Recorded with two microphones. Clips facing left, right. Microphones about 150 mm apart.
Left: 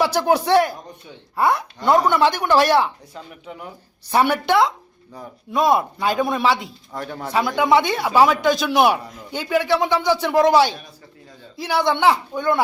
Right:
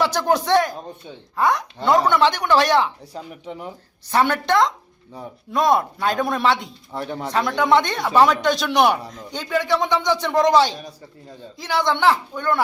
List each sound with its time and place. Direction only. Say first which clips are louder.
0.0 s speech: left 2 dB; 10° left (ahead or behind)
3.4 s speech: right 2 dB; 30° right (ahead or behind)
4.1 s speech: left 1 dB; 10° left (ahead or behind)
7.0 s speech: right 2 dB; 20° right (ahead or behind)
7.3 s speech: left 1 dB; 10° left (ahead or behind)